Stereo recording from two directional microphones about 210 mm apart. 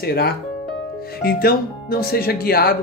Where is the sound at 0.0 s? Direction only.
50° left (ahead or behind).